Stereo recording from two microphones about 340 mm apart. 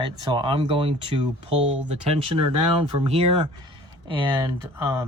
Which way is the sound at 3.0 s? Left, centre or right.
Centre.